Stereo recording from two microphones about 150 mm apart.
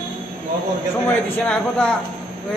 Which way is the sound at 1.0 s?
10° left (ahead or behind).